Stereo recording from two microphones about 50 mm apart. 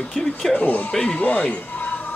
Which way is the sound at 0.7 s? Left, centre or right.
Left.